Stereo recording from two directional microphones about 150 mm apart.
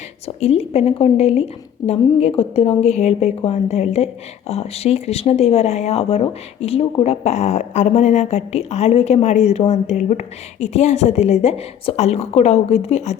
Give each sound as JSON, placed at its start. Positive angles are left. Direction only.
{"t": 0.3, "sound": "speech", "side_deg": 45}